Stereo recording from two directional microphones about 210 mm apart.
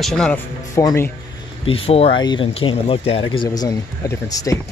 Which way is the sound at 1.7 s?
25° left (ahead or behind).